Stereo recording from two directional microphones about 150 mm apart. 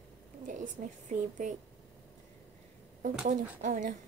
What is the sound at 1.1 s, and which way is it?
Speech, 55° right (ahead or behind).